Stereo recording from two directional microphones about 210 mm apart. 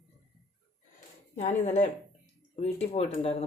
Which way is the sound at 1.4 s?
35° left (ahead or behind).